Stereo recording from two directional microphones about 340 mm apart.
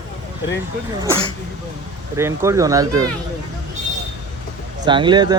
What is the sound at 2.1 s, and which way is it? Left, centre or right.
Speech, centre.